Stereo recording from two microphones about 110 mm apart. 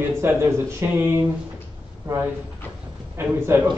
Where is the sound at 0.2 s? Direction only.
25° right (ahead or behind).